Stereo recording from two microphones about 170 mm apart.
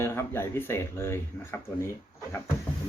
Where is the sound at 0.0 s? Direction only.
15° left (ahead or behind).